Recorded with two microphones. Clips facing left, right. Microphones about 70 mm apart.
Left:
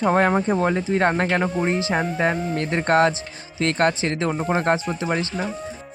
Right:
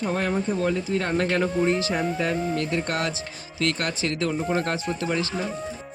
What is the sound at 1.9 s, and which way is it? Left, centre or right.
Speech, left.